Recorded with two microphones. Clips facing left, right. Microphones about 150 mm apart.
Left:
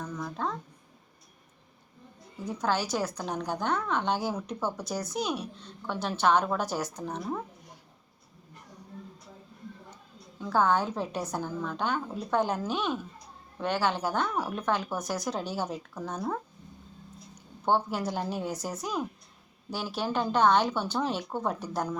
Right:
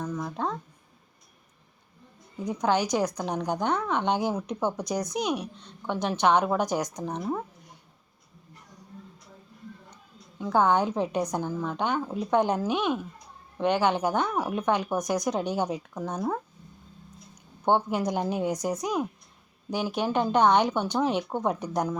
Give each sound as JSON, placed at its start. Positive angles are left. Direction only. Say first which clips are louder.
{"t": 0.0, "sound": "a sound", "louder": "right 3 dB", "side_deg": -10}
{"t": 2.4, "sound": "a woman's voice", "louder": "right 4 dB", "side_deg": -15}
{"t": 10.4, "sound": "a woman's voice", "louder": "right 3 dB", "side_deg": -15}
{"t": 17.7, "sound": "a woman's voice", "louder": "right 3 dB", "side_deg": -15}